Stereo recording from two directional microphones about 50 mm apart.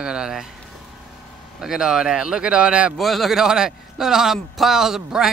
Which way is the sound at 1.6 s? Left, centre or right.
Centre.